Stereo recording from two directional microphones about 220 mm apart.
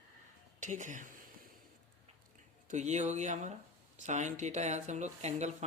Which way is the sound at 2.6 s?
30° right (ahead or behind).